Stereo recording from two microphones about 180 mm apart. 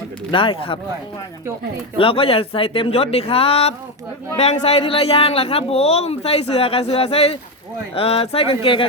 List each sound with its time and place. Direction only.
0.3 s speech: 30° left (ahead or behind)
2.0 s speech: 30° left (ahead or behind)